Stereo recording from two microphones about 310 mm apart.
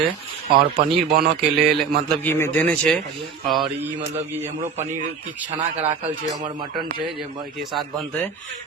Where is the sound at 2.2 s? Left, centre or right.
Centre.